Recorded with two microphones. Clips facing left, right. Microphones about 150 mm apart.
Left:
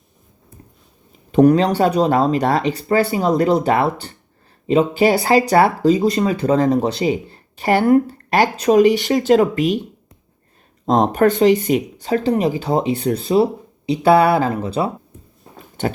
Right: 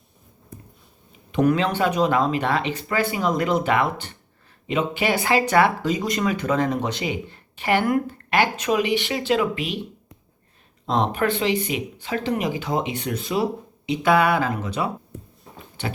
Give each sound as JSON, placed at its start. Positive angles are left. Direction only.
{"t": 1.3, "sound": "speech", "side_deg": 35}
{"t": 10.8, "sound": "speech", "side_deg": 45}
{"t": 15.8, "sound": "chewing", "side_deg": 45}